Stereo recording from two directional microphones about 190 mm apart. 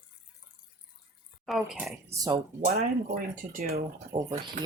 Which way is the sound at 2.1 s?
20° right (ahead or behind).